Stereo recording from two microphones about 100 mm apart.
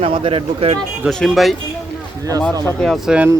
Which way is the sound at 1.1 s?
Centre (ahead or behind).